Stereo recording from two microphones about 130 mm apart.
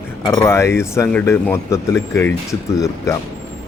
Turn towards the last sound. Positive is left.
turn(degrees=25)  # may be behind; listen again after turning